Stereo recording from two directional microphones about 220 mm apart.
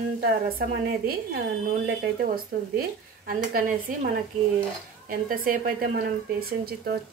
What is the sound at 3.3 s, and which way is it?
Speech, 40° right (ahead or behind).